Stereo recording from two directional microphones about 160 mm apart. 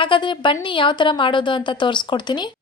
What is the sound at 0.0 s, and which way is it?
Speech, 30° left (ahead or behind).